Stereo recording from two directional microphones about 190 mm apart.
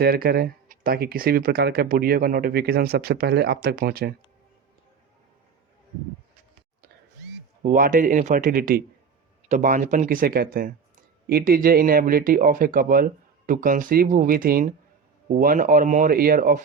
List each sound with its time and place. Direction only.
0.0 s speech: 55° right (ahead or behind)
7.6 s speech: 45° right (ahead or behind)